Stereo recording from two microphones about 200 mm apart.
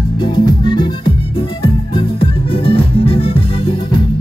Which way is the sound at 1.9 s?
25° left (ahead or behind).